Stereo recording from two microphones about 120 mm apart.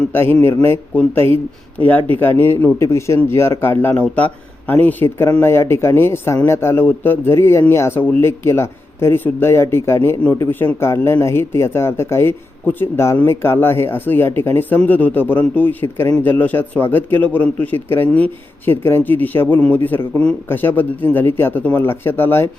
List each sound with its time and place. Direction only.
0.1 s a man's voice: 20° left (ahead or behind)